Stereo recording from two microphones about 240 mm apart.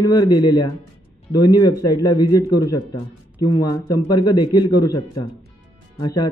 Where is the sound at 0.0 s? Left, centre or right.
Centre.